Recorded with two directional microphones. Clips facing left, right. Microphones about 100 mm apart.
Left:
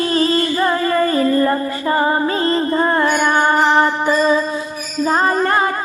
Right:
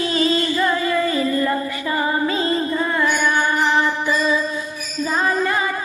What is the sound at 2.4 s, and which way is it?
Music, 60° left (ahead or behind).